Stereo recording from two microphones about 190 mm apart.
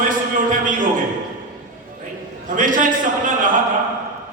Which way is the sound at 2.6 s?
45° right (ahead or behind).